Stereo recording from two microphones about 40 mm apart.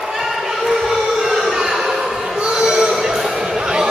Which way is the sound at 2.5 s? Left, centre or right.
Centre.